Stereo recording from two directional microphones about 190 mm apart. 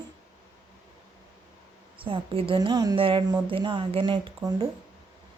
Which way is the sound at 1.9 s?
25° right (ahead or behind).